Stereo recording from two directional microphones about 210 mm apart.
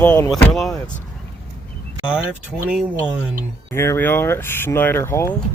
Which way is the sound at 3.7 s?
10° left (ahead or behind).